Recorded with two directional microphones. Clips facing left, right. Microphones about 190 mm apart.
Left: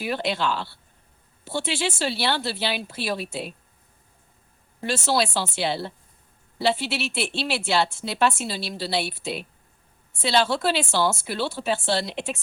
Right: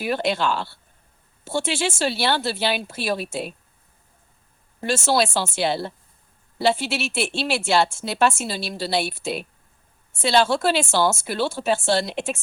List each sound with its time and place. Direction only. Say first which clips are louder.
0.0 s speech: right 3 dB; 45° right (ahead or behind)
4.8 s speech: right 3 dB; 45° right (ahead or behind)